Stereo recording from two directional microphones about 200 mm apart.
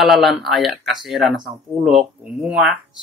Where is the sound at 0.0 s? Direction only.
Centre (ahead or behind).